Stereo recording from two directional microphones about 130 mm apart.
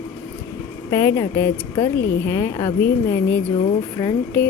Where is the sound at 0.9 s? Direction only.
25° left (ahead or behind).